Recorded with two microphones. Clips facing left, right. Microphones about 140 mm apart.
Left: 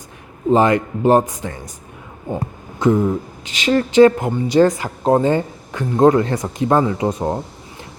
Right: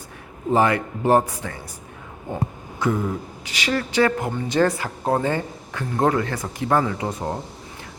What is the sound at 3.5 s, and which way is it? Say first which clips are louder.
A man's voice: left 8 dB; 20° left (ahead or behind).